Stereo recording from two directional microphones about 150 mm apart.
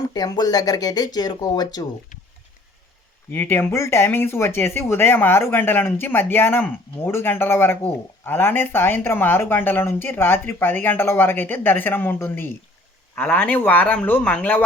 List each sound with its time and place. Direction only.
0.1 s speech: 25° left (ahead or behind)
3.3 s speech: 15° left (ahead or behind)